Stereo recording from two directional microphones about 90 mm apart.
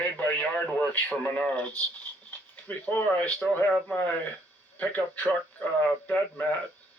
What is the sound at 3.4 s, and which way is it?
Speech, 10° left (ahead or behind).